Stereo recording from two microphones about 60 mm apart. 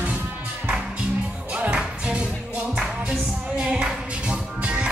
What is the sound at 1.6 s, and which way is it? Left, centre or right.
Music, centre.